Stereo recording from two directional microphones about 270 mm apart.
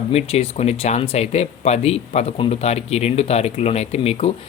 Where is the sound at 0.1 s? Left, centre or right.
Left.